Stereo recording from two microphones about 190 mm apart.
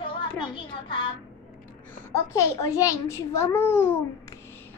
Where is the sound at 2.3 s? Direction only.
15° left (ahead or behind).